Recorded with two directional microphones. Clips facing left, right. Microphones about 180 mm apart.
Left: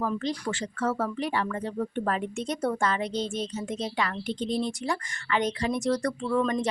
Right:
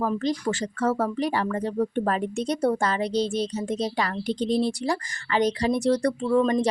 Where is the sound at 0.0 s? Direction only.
40° right (ahead or behind).